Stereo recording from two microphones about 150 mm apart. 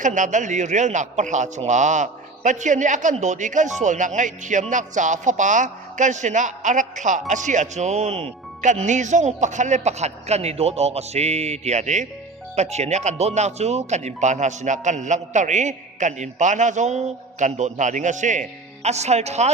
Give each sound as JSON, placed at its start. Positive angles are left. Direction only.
{"t": 0.0, "sound": "a man's voice", "side_deg": -55}